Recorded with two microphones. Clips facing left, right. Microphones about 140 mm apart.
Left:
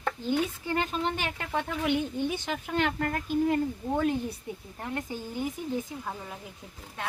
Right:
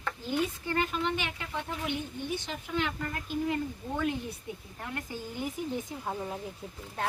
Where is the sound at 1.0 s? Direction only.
40° left (ahead or behind).